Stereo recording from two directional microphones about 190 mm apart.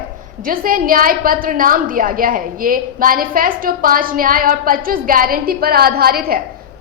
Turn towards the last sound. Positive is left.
turn(degrees=-50)  # may be behind; listen again after turning